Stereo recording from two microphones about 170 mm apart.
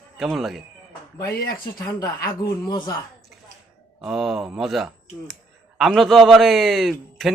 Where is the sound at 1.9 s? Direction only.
20° left (ahead or behind).